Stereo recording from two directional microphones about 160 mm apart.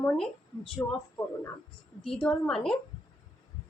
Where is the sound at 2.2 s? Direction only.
5° left (ahead or behind).